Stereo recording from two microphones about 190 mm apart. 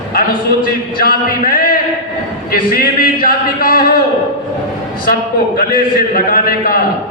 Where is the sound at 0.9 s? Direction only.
50° left (ahead or behind).